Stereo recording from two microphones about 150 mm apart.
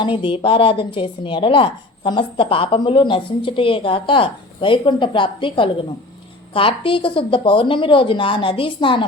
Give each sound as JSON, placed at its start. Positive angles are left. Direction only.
{"t": 0.0, "sound": "speech", "side_deg": 35}